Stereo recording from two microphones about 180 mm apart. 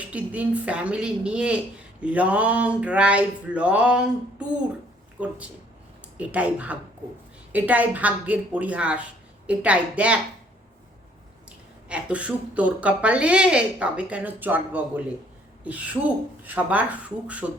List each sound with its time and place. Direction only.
0.0 s speech: 10° right (ahead or behind)
11.9 s speech: 5° right (ahead or behind)